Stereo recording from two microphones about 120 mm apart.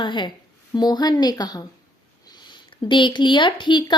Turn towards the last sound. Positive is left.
turn(degrees=40)  # may be behind; listen again after turning